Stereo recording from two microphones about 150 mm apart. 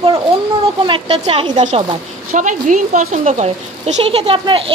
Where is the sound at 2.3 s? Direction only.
60° right (ahead or behind).